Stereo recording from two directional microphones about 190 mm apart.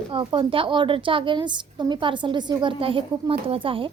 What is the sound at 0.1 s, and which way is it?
A woman's voice, 25° right (ahead or behind).